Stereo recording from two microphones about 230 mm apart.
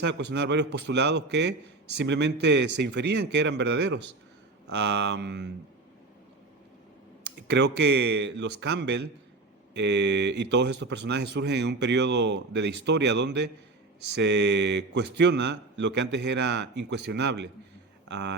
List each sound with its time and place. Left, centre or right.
0.0 s speech: right
7.3 s speech: right